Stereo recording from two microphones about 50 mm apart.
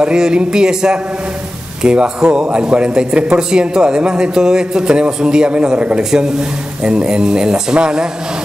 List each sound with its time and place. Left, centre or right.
0.0 s a man's voice: centre